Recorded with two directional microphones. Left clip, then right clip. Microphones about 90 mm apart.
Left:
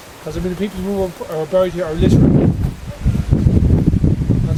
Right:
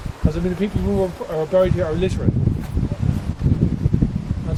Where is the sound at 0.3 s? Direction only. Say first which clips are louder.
Left 1 dB; 20° left (ahead or behind).